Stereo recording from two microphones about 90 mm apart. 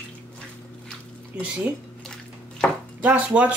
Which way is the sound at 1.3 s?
15° right (ahead or behind).